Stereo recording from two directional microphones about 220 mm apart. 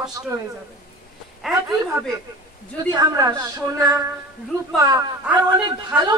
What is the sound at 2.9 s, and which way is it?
A man's voice, 15° right (ahead or behind).